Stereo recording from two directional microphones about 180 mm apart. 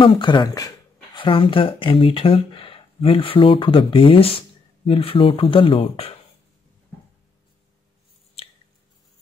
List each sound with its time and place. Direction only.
0.0 s speech: 30° left (ahead or behind)